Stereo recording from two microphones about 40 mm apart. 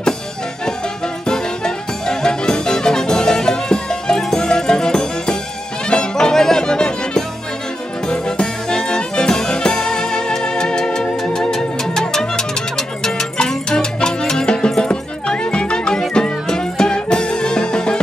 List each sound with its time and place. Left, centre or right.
1.2 s music: centre